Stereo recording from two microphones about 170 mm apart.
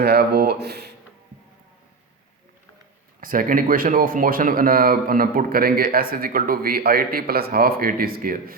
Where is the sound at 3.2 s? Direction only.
55° right (ahead or behind).